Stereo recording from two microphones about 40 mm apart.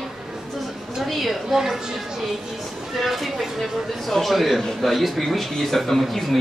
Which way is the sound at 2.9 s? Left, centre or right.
Centre.